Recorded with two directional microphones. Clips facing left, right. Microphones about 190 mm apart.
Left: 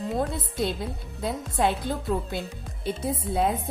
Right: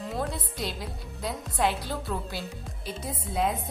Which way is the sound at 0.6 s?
25° left (ahead or behind).